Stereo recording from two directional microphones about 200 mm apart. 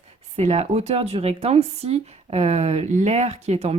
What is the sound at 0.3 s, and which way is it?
Speech, 30° right (ahead or behind).